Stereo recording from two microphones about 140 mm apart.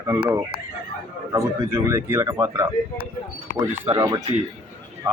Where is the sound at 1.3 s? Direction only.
20° right (ahead or behind).